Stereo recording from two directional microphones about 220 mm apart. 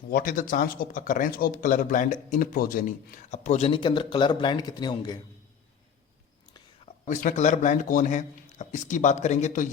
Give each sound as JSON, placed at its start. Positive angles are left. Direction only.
{"t": 0.1, "sound": "speech", "side_deg": 40}
{"t": 7.1, "sound": "speech", "side_deg": 35}